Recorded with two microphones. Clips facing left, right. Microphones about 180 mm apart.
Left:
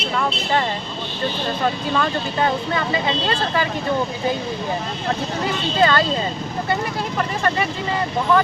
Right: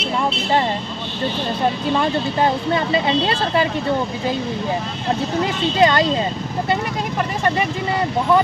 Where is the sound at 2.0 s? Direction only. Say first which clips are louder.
Right 2 dB; 25° right (ahead or behind).